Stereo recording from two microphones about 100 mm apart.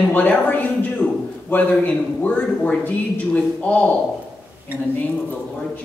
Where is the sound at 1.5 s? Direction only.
15° left (ahead or behind).